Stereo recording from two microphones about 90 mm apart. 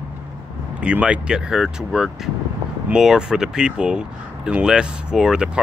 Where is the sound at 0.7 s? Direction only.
10° right (ahead or behind).